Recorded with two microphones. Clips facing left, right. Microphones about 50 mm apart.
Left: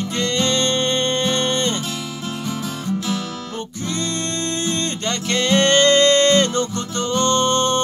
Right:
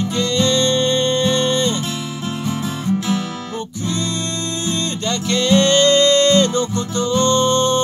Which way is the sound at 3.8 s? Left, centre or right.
Left.